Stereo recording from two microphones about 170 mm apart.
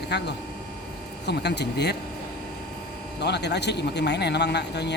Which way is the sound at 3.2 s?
80° left.